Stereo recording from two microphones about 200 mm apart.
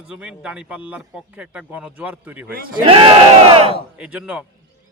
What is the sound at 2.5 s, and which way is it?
Speech, 45° right (ahead or behind).